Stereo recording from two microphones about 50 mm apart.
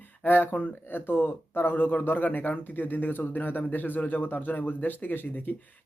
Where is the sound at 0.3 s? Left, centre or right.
Left.